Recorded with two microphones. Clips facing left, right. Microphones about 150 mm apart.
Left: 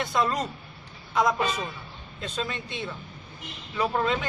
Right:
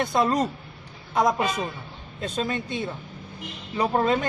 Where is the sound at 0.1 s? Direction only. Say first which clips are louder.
Right 2 dB; 35° right (ahead or behind).